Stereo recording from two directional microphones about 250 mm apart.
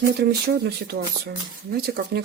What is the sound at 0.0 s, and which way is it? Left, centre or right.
Speech, right.